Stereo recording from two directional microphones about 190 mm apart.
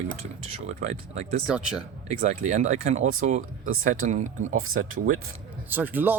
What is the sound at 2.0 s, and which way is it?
Speech, 40° right (ahead or behind).